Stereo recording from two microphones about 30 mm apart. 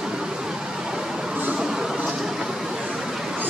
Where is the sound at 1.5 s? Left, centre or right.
Right.